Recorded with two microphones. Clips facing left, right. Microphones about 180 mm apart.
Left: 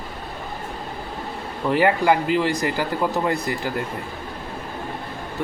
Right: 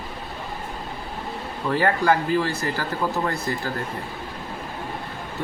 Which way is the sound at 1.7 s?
15° left (ahead or behind).